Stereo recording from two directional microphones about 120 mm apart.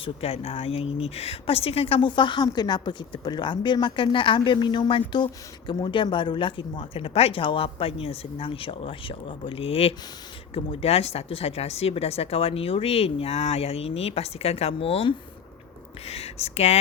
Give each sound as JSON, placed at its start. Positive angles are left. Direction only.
{"t": 0.0, "sound": "speech", "side_deg": 55}
{"t": 2.0, "sound": "a woman's voice", "side_deg": 40}